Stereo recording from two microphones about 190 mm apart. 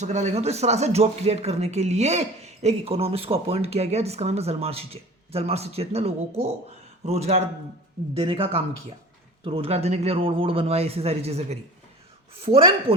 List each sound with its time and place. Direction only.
0.0 s speech: 35° right (ahead or behind)